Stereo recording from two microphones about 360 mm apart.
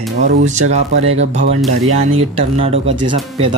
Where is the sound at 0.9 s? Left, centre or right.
Right.